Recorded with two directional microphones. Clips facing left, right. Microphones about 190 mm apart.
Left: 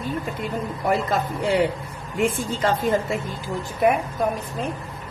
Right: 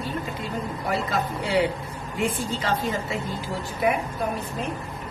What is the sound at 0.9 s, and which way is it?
A woman's voice, 50° left (ahead or behind).